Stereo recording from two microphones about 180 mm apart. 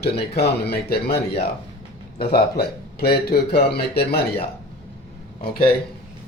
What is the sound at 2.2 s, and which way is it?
A man's voice, 60° left (ahead or behind).